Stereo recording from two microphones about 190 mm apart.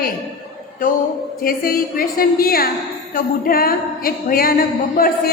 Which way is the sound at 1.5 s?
50° left (ahead or behind).